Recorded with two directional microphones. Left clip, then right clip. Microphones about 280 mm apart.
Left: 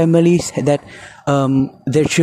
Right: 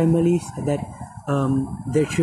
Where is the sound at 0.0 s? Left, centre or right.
Left.